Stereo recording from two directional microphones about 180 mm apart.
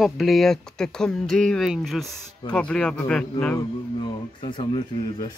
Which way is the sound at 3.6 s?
25° left (ahead or behind).